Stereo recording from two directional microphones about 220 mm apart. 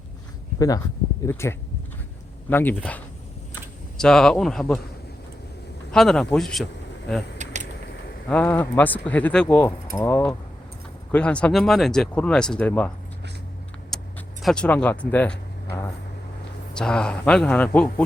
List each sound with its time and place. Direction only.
1.2 s speech: 10° left (ahead or behind)
5.9 s speech: centre (ahead or behind)
7.3 s a sound: 35° right (ahead or behind)
8.3 s speech: 5° left (ahead or behind)
13.9 s a sound: centre (ahead or behind)
14.4 s speech: 5° left (ahead or behind)
16.7 s speech: 5° left (ahead or behind)